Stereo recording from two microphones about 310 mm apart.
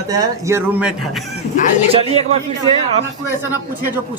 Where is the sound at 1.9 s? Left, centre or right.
Centre.